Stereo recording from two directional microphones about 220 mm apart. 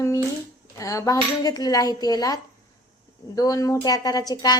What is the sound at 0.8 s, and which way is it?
Speech, 15° left (ahead or behind).